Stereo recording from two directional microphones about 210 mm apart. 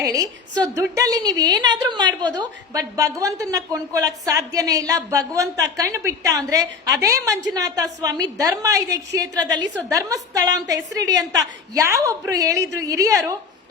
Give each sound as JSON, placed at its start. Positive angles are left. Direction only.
{"t": 0.0, "sound": "a woman's voice", "side_deg": -15}